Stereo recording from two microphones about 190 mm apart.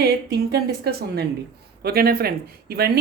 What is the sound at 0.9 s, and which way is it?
Speech, 55° right (ahead or behind).